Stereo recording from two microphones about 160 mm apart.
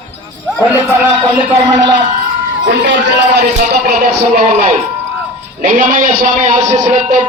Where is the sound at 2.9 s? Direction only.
90° right.